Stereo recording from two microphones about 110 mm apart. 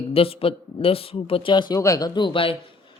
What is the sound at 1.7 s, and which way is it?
Speech, 30° left (ahead or behind).